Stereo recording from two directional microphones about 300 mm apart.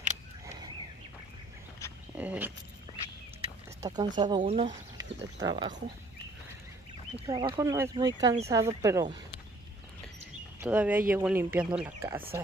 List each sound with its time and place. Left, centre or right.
2.1 s speech: centre
3.3 s a sound: centre
4.4 s speech: centre
7.2 s speech: centre
10.6 s speech: centre